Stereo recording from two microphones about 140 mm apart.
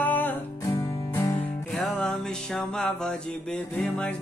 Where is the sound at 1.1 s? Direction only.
20° left (ahead or behind).